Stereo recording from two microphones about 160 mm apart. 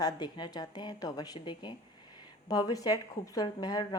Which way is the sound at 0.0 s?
25° left (ahead or behind).